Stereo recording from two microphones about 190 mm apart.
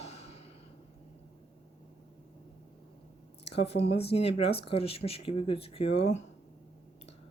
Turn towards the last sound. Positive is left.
turn(degrees=35)  # may be behind; listen again after turning